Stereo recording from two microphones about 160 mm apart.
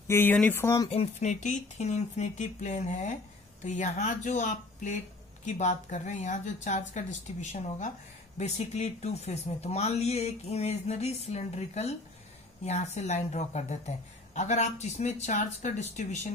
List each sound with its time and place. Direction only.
0.1 s speech: 10° left (ahead or behind)
0.8 s a woman's voice: 45° left (ahead or behind)